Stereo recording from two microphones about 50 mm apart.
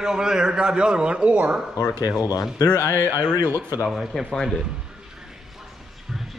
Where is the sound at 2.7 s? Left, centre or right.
Left.